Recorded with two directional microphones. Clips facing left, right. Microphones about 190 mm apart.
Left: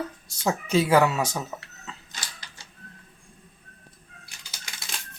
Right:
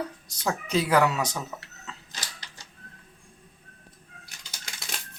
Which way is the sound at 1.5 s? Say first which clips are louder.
Left 2 dB; 20° left (ahead or behind).